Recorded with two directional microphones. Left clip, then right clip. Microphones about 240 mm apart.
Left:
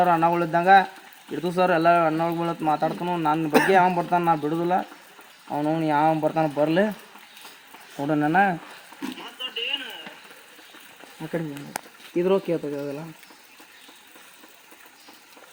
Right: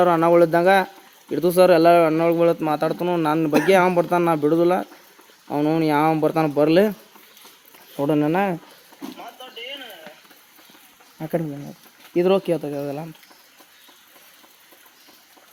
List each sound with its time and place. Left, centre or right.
0.0 s speech: right
7.9 s speech: right
12.1 s speech: right